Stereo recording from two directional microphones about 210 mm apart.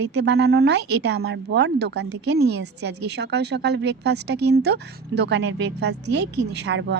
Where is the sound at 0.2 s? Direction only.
50° right (ahead or behind).